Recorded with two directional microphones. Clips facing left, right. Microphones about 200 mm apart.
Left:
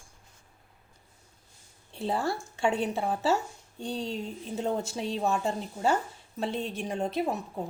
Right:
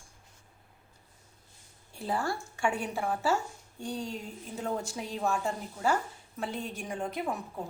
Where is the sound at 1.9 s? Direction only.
25° left (ahead or behind).